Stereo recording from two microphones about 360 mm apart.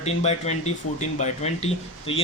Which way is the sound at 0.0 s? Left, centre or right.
Centre.